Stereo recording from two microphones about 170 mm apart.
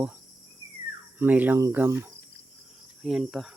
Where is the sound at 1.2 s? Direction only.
10° right (ahead or behind).